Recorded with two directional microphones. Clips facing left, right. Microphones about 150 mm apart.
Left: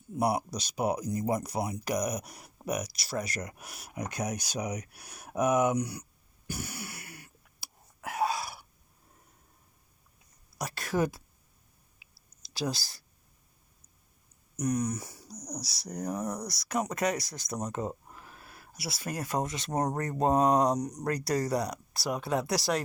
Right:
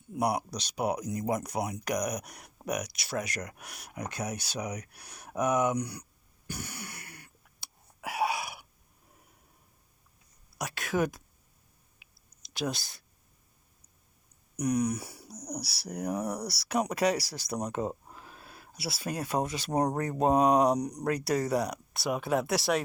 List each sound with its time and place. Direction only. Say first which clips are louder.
0.1 s speech: left 1 dB; centre (ahead or behind)
6.5 s cough: left 2 dB; 10° left (ahead or behind)
8.0 s dog: even; 10° right (ahead or behind)
10.6 s speech: even; centre (ahead or behind)
12.5 s speech: even; centre (ahead or behind)
14.5 s speech: right 2 dB; 10° right (ahead or behind)
17.2 s speech: right 2 dB; 30° right (ahead or behind)
17.5 s a sound: right 2 dB; 10° right (ahead or behind); by 19.3 s 30° right (ahead or behind)
19.7 s speech: right 2 dB; 10° right (ahead or behind)
21.2 s speech: even; 5° right (ahead or behind)